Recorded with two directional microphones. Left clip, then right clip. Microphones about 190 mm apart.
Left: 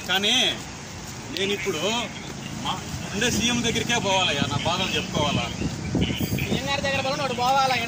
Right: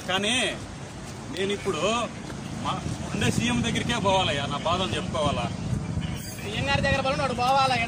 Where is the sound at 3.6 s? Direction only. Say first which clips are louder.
Left 2 dB; 45° right (ahead or behind).